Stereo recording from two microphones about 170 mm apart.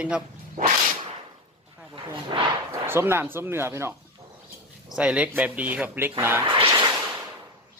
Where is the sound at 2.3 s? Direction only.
30° right (ahead or behind).